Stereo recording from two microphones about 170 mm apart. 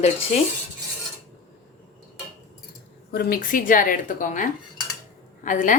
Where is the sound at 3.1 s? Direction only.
65° left (ahead or behind).